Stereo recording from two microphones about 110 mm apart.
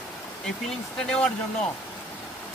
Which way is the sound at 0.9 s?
10° left (ahead or behind).